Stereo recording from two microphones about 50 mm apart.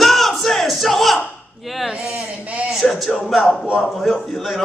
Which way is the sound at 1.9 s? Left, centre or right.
Centre.